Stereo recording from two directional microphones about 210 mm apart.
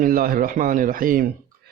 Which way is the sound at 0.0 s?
45° right (ahead or behind).